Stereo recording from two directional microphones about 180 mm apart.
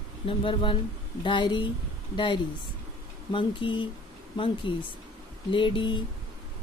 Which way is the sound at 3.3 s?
30° left (ahead or behind).